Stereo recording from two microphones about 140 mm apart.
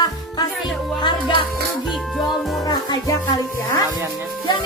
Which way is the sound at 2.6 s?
30° left (ahead or behind).